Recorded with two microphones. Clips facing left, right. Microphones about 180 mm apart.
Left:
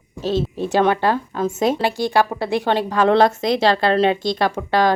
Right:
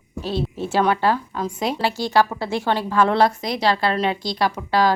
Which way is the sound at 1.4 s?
45° left (ahead or behind).